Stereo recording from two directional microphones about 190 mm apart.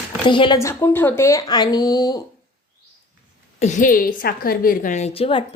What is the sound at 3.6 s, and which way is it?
A woman's voice, 40° left (ahead or behind).